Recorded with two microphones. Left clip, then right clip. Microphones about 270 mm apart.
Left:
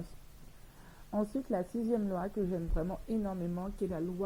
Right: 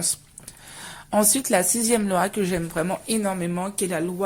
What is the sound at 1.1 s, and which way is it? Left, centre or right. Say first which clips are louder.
Speech: right 14 dB; right.